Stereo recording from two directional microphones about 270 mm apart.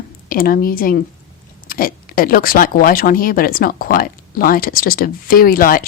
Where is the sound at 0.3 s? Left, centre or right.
Left.